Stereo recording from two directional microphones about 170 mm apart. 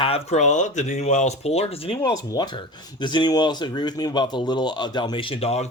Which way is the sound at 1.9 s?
20° left (ahead or behind).